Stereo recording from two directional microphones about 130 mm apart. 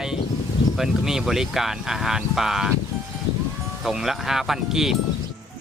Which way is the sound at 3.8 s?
5° right (ahead or behind).